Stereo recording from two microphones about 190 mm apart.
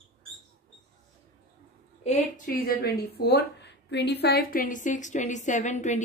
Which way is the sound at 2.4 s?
50° left (ahead or behind).